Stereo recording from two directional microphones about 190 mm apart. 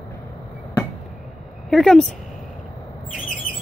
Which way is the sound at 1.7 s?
5° left (ahead or behind).